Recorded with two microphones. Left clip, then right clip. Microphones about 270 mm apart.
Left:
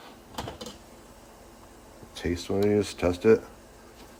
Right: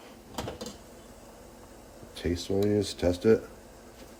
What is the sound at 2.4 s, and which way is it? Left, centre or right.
Speech, centre.